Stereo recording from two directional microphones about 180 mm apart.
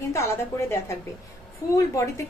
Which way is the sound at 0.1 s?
15° left (ahead or behind).